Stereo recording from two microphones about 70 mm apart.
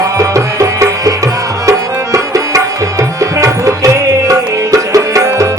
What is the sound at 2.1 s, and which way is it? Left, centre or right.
Music, right.